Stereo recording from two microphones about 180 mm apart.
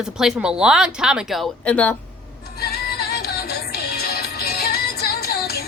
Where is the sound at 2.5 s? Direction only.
60° left (ahead or behind).